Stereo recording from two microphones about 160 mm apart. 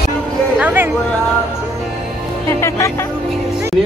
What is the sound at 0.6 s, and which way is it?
Music, 10° right (ahead or behind).